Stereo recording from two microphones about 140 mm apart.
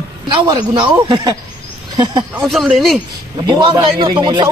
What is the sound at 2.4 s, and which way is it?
Speech, centre (ahead or behind).